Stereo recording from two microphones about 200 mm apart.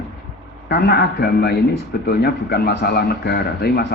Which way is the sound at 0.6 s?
55° left (ahead or behind).